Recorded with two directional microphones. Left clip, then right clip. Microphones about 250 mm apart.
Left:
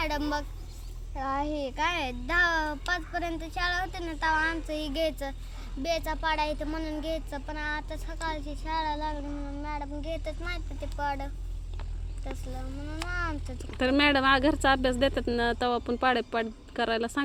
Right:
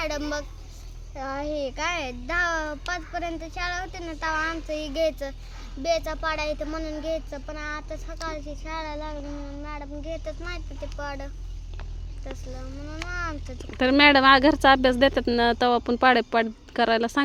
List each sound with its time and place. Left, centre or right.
0.0 s a child's voice: centre
13.7 s a woman's voice: centre